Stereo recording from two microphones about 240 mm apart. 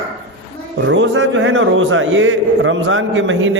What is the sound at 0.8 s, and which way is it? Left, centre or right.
A man's voice, right.